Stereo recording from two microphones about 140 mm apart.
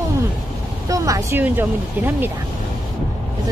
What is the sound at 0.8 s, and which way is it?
Speech, 25° right (ahead or behind).